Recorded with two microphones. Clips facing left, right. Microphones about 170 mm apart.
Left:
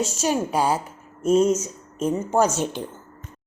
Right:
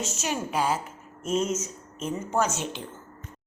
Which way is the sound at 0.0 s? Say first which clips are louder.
Left 7 dB; 35° left (ahead or behind).